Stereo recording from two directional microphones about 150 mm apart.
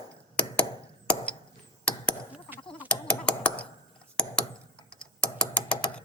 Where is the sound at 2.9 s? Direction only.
10° left (ahead or behind).